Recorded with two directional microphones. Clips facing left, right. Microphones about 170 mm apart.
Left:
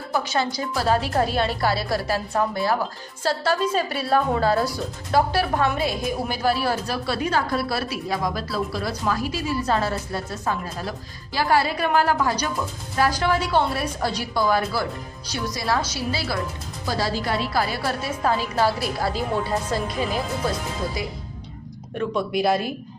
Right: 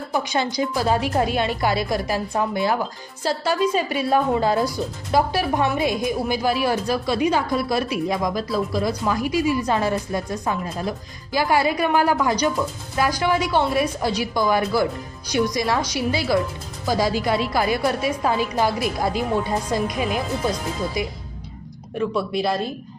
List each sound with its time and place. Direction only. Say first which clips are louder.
0.1 s a woman's voice: even; 15° right (ahead or behind)
21.9 s speech: right 1 dB; centre (ahead or behind)